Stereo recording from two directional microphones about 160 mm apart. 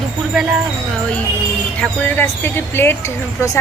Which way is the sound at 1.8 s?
10° left (ahead or behind).